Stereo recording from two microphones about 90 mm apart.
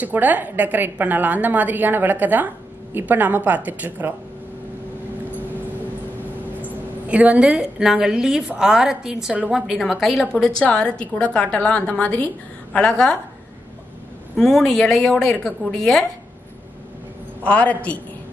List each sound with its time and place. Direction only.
0.0 s a woman's voice: 20° right (ahead or behind)
7.1 s a woman's voice: 15° right (ahead or behind)
10.3 s a woman's voice: 10° left (ahead or behind)
14.3 s speech: 5° left (ahead or behind)
17.4 s a woman's voice: 15° left (ahead or behind)